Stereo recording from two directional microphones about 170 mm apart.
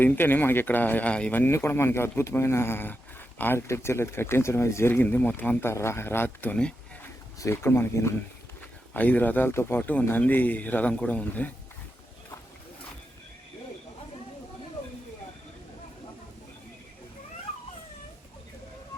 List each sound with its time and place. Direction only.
0.0 s speech: 10° left (ahead or behind)